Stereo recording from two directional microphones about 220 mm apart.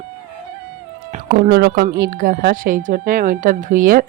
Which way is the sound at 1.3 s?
45° right (ahead or behind).